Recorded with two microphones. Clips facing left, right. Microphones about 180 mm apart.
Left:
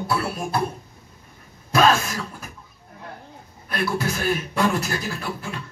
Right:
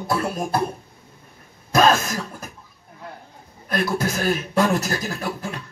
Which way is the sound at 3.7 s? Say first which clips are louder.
Right 2 dB; 40° right (ahead or behind).